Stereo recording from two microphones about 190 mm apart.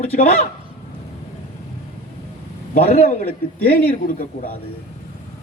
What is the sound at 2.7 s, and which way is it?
Speech, 35° left (ahead or behind).